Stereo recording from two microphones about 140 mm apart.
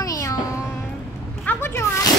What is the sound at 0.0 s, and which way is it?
Music, 25° left (ahead or behind).